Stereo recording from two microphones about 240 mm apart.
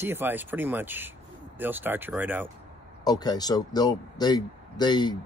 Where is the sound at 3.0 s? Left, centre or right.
Centre.